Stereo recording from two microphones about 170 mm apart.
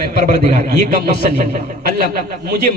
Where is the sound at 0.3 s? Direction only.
50° right (ahead or behind).